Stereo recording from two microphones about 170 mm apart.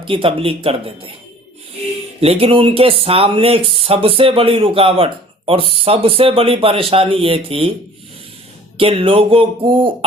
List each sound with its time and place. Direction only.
0.0 s speech: 30° right (ahead or behind)
2.2 s speech: 35° right (ahead or behind)
8.8 s speech: 35° right (ahead or behind)